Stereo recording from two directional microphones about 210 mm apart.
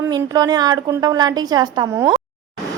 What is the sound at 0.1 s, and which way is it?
A woman's voice, 20° right (ahead or behind).